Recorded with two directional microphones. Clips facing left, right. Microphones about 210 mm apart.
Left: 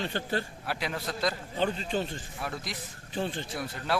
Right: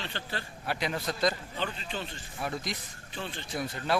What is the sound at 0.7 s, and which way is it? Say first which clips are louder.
Speech: right 5 dB; 5° left (ahead or behind).